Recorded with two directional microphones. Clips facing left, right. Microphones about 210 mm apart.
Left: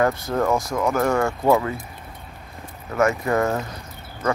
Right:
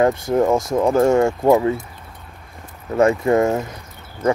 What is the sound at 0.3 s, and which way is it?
Speech, 25° right (ahead or behind).